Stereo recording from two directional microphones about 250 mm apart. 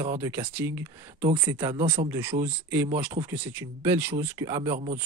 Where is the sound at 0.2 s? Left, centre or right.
Centre.